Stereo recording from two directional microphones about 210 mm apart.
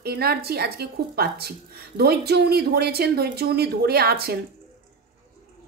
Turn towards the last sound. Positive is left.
turn(degrees=-50)  # may be behind; listen again after turning